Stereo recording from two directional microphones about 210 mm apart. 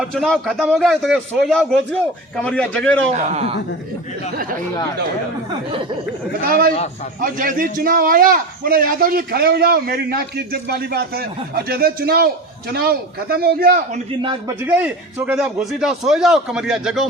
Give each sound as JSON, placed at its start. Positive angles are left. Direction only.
{"t": 0.0, "sound": "a man's voice", "side_deg": 0}
{"t": 3.1, "sound": "a man's voice", "side_deg": -30}
{"t": 5.5, "sound": "a sound", "side_deg": -25}
{"t": 6.5, "sound": "a man's voice", "side_deg": -45}
{"t": 14.2, "sound": "a sound", "side_deg": -20}
{"t": 15.3, "sound": "a man's voice", "side_deg": -5}